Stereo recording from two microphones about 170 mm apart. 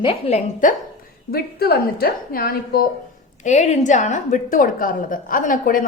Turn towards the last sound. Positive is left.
turn(degrees=55)  # may be behind; listen again after turning